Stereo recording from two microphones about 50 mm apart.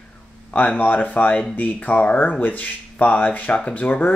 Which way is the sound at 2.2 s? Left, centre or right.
Left.